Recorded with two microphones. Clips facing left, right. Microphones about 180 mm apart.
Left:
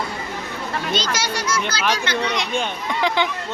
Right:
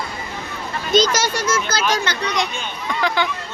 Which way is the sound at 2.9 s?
20° left (ahead or behind).